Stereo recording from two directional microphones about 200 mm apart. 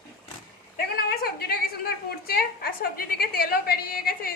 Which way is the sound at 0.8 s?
50° left (ahead or behind).